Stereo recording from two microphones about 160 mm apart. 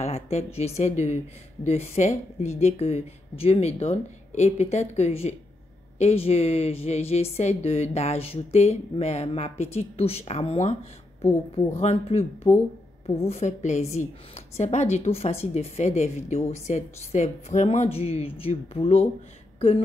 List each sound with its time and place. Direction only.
0.0 s speech: 40° left (ahead or behind)